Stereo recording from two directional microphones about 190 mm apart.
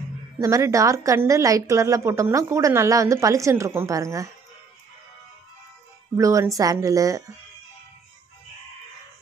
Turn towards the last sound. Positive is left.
turn(degrees=-15)  # may be behind; listen again after turning